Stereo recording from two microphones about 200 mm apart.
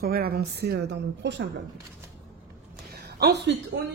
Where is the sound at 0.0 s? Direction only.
50° right (ahead or behind).